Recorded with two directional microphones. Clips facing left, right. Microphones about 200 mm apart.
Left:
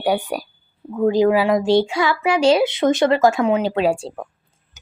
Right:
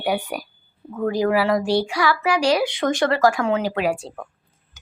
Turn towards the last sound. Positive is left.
turn(degrees=30)  # may be behind; listen again after turning